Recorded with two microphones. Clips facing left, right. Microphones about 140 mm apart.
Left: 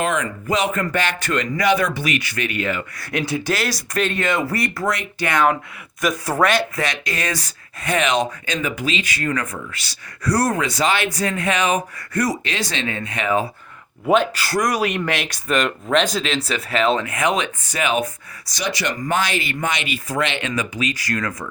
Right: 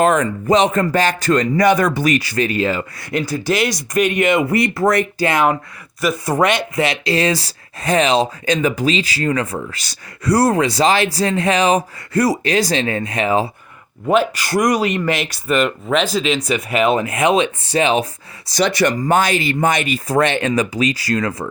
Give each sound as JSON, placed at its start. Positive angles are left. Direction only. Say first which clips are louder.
{"t": 0.0, "sound": "speech", "louder": "right 7 dB", "side_deg": -45}
{"t": 3.1, "sound": "speech", "louder": "right 2 dB", "side_deg": 0}
{"t": 3.9, "sound": "speech", "louder": "right 6 dB", "side_deg": -15}
{"t": 6.0, "sound": "speech", "louder": "right 2 dB", "side_deg": -10}
{"t": 9.6, "sound": "speech", "louder": "right 5 dB", "side_deg": -45}
{"t": 10.2, "sound": "speech", "louder": "right 5 dB", "side_deg": -30}
{"t": 14.1, "sound": "speech", "louder": "right 1 dB", "side_deg": -5}
{"t": 14.5, "sound": "speech", "louder": "right 5 dB", "side_deg": -20}
{"t": 15.0, "sound": "speech", "louder": "right 4 dB", "side_deg": -10}
{"t": 18.6, "sound": "speech", "louder": "right 8 dB", "side_deg": -55}